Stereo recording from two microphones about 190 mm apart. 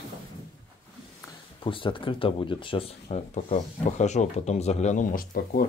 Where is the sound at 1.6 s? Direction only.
25° left (ahead or behind); by 5.7 s 45° left (ahead or behind).